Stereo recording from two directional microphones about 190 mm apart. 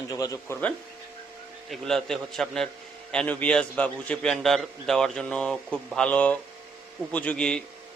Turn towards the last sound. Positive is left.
turn(degrees=5)  # may be behind; listen again after turning